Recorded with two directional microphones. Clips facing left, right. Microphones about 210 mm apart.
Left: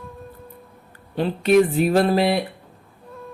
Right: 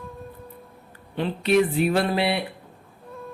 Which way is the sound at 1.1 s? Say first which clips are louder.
Left 4 dB; 40° left (ahead or behind).